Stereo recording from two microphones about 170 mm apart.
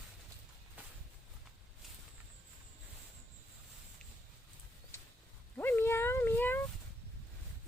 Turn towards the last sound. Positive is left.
turn(degrees=10)  # may be behind; listen again after turning